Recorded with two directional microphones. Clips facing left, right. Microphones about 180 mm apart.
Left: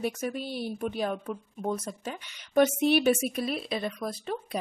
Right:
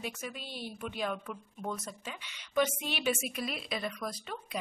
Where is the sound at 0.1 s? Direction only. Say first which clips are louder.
Left 9 dB; 40° left (ahead or behind).